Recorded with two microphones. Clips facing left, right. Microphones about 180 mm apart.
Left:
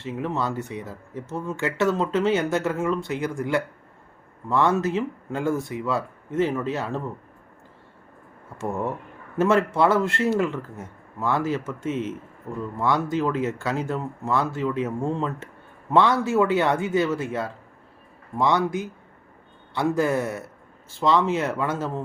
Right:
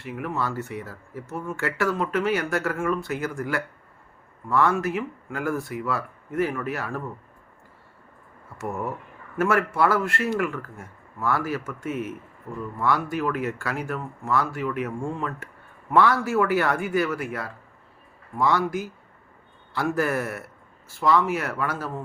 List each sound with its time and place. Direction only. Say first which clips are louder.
0.0 s speech: left 2 dB; 25° left (ahead or behind)
8.6 s speech: left 3 dB; 20° left (ahead or behind)